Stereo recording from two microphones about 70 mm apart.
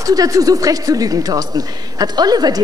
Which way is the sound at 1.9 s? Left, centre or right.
Right.